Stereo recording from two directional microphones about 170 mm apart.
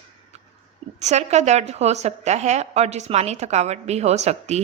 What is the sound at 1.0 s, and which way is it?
A woman's voice, 40° right (ahead or behind).